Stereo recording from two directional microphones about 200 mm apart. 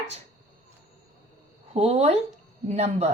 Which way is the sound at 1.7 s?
30° right (ahead or behind).